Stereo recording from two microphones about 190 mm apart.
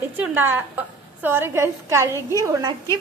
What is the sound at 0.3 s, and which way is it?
A woman's voice, 10° right (ahead or behind).